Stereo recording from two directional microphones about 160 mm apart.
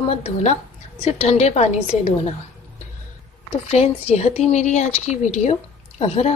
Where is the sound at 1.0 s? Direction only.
40° left (ahead or behind).